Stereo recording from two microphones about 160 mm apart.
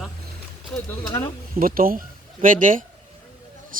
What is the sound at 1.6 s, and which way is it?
Speech, 65° right (ahead or behind).